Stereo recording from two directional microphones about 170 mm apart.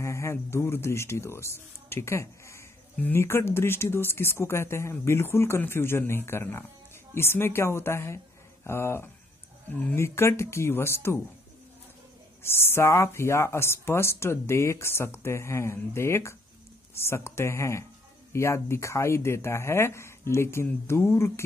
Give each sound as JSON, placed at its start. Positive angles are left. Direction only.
{"t": 0.0, "sound": "speech", "side_deg": 15}
{"t": 12.4, "sound": "speech", "side_deg": 15}